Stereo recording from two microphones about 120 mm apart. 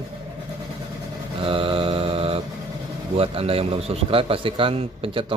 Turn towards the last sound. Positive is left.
turn(degrees=-50)  # may be behind; listen again after turning